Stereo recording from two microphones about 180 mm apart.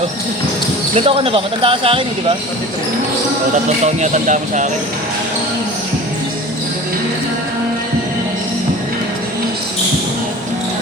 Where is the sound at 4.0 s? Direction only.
45° right (ahead or behind).